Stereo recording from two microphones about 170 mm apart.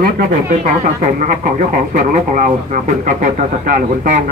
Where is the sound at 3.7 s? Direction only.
50° right (ahead or behind).